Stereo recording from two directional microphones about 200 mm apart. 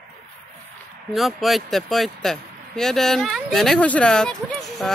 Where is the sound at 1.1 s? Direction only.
Centre (ahead or behind).